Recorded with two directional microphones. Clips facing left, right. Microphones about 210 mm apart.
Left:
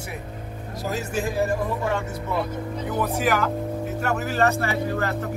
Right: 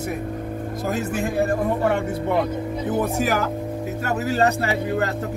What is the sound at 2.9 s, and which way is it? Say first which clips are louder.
Speech: right 1 dB; 45° right (ahead or behind).